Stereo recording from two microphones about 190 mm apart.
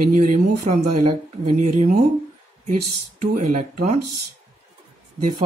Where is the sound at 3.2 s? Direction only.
45° right (ahead or behind).